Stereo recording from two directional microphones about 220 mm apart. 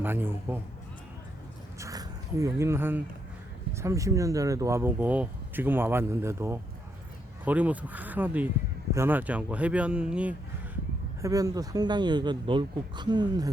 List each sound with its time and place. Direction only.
0.0 s speech: 10° right (ahead or behind)
1.8 s speech: 15° right (ahead or behind)
11.2 s speech: 15° right (ahead or behind)